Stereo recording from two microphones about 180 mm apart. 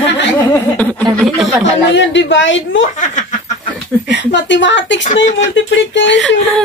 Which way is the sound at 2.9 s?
45° left (ahead or behind).